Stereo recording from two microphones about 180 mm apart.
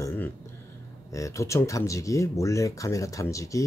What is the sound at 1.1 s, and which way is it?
Speech, 15° left (ahead or behind).